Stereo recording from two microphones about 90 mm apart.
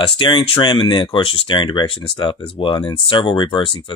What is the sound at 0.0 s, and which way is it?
Speech, 75° left (ahead or behind).